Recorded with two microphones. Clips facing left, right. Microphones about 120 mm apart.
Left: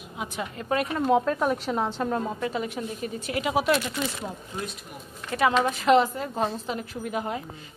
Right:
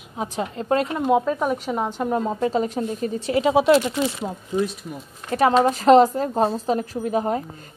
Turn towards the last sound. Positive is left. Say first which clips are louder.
# right 7 dB
turn(degrees=-35)  # may be behind; listen again after turning